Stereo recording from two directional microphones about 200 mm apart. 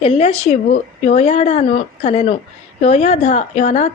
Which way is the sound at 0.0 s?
30° left (ahead or behind).